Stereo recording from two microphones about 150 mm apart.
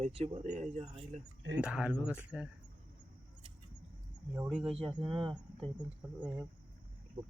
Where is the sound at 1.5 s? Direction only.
5° right (ahead or behind).